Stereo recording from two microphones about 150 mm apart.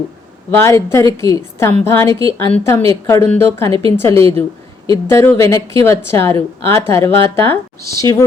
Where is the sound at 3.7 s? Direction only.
35° right (ahead or behind).